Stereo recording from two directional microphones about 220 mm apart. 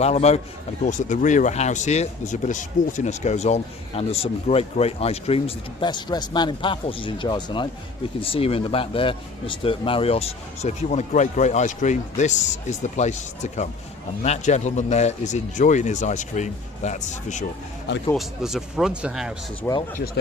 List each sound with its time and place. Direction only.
0.0 s speech: 30° left (ahead or behind)
18.1 s speech: centre (ahead or behind)
19.6 s speech: 15° left (ahead or behind)